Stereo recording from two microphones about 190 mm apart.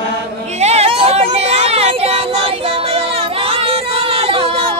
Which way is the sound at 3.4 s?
30° right (ahead or behind).